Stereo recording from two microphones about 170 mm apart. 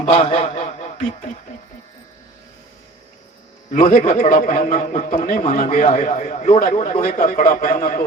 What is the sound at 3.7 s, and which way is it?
A man's voice, 50° left (ahead or behind).